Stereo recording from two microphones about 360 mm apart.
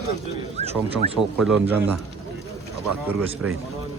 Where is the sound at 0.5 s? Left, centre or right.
Centre.